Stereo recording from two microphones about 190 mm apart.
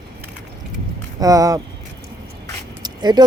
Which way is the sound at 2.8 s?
20° right (ahead or behind).